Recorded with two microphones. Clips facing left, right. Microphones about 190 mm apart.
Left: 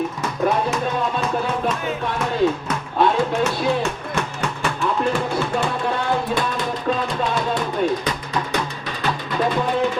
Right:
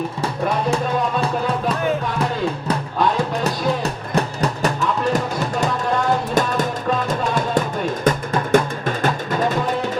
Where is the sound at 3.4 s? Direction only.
35° right (ahead or behind).